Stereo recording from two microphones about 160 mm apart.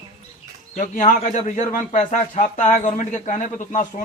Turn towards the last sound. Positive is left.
turn(degrees=50)  # may be behind; listen again after turning